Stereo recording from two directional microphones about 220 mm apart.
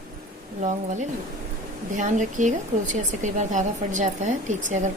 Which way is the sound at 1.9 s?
35° right (ahead or behind).